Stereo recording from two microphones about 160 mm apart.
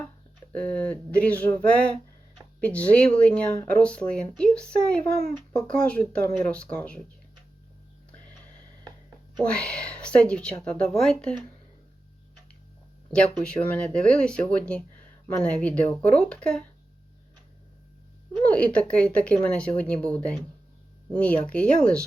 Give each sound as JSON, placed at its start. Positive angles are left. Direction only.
{"t": 0.5, "sound": "speech", "side_deg": 10}
{"t": 8.8, "sound": "a sound", "side_deg": -25}
{"t": 9.4, "sound": "speech", "side_deg": 5}
{"t": 13.1, "sound": "speech", "side_deg": 5}
{"t": 18.3, "sound": "speech", "side_deg": 10}